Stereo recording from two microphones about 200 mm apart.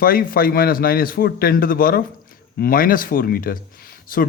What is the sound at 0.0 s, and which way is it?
A man's voice, 45° left (ahead or behind).